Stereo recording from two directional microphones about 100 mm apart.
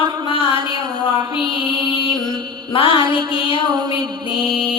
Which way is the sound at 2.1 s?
45° right (ahead or behind).